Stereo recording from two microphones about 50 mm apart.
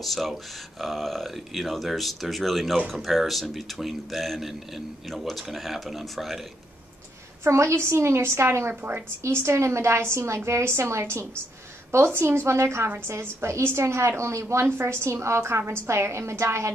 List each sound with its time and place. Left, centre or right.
0.0 s speech: centre
7.4 s a woman's voice: right
9.2 s a woman's voice: right
12.0 s a woman's voice: right